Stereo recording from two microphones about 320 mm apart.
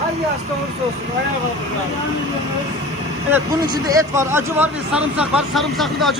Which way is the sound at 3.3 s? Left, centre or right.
Centre.